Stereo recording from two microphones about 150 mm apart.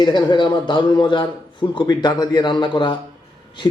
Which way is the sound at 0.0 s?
30° left (ahead or behind).